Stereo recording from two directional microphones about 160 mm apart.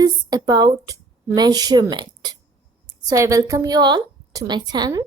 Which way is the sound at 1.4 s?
25° right (ahead or behind).